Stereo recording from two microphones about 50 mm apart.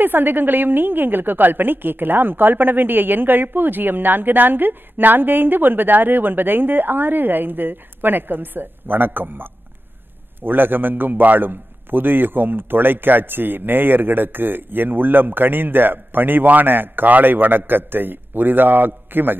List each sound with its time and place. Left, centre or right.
0.0 s a woman's voice: right